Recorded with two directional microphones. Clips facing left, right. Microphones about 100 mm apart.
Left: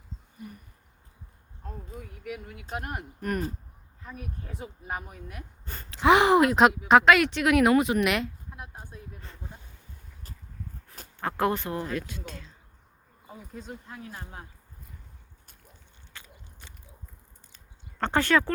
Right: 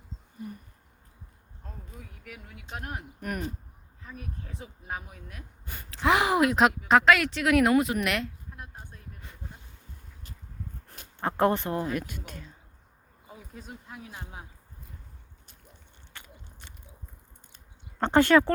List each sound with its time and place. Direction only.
0.4 s speech: 30° right (ahead or behind)
2.2 s speech: 5° left (ahead or behind)
5.6 s a sound: 10° right (ahead or behind)
6.0 s speech: centre (ahead or behind)
11.2 s speech: 25° right (ahead or behind); by 14.4 s 5° right (ahead or behind)
18.0 s speech: 20° right (ahead or behind)